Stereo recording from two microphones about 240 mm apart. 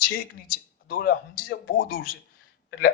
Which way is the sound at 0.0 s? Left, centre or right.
Left.